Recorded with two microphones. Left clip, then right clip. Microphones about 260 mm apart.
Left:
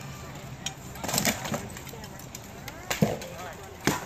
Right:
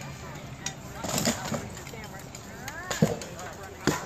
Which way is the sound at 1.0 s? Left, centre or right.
Left.